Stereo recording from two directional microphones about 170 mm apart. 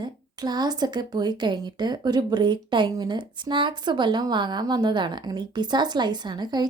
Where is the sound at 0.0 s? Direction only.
25° right (ahead or behind).